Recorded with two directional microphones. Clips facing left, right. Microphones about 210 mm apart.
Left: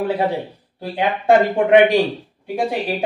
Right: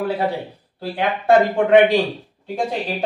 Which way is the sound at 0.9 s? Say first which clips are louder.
Left 1 dB; 15° left (ahead or behind).